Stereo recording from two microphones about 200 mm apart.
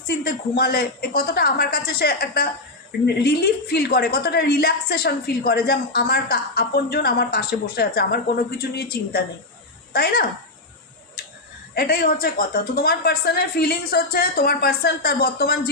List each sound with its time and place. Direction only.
0.1 s a woman's voice: 50° left (ahead or behind)
11.7 s a woman's voice: 50° left (ahead or behind)